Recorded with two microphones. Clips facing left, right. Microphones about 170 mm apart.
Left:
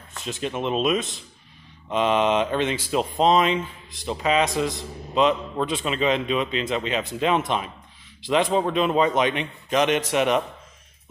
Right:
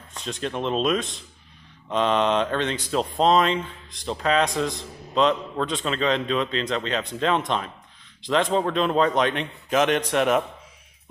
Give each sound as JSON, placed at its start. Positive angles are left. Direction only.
{"t": 0.1, "sound": "a man's voice", "side_deg": 5}